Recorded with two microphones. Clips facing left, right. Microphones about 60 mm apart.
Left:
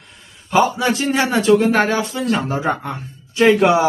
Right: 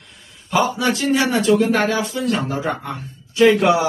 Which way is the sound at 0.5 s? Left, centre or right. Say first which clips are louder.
Left 2 dB; left.